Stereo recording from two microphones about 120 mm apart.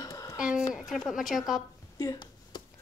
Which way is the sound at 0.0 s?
30° left (ahead or behind).